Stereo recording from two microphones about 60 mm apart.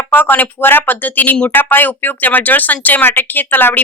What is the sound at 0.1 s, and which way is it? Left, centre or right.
A woman's voice, left.